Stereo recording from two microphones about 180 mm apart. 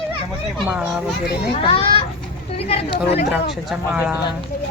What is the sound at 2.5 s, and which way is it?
Chatter, 35° left (ahead or behind).